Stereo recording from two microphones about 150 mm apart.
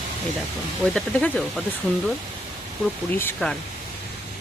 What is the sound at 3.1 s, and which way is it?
Speech, 15° left (ahead or behind).